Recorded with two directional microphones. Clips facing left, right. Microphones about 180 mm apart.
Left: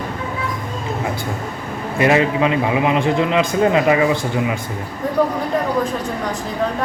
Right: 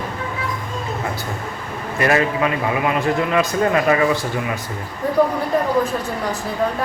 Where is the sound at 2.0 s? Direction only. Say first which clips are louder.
Left 3 dB; 20° left (ahead or behind).